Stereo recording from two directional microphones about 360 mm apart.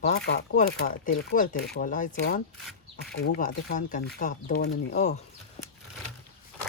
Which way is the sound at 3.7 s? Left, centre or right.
Left.